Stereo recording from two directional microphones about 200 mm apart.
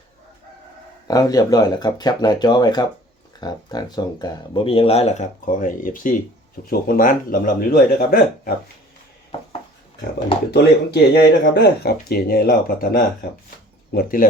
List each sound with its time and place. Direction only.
1.0 s speech: 20° left (ahead or behind); by 8.5 s 50° left (ahead or behind)
10.5 s speech: 55° left (ahead or behind)